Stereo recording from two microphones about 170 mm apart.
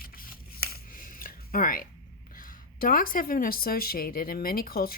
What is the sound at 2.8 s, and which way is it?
Speech, 55° left (ahead or behind).